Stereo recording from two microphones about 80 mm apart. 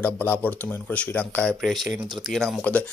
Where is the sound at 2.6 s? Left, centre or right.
Centre.